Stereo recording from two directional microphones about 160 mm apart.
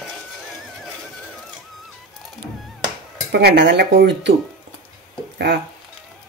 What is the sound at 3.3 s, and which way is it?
Speech, 90° right.